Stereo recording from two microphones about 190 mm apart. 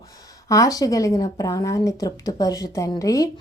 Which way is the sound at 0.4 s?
15° left (ahead or behind).